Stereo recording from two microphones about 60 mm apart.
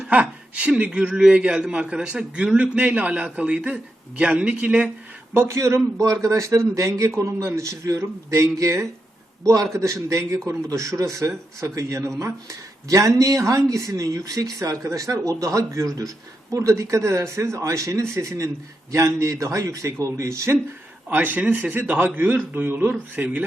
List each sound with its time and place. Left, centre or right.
0.0 s a sound: right
0.8 s a man's voice: centre
5.3 s speech: right
21.1 s a man's voice: right